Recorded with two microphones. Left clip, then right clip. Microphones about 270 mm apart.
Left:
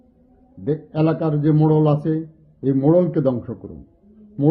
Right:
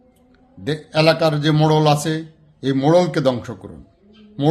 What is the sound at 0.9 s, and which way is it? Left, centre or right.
A man's voice, centre.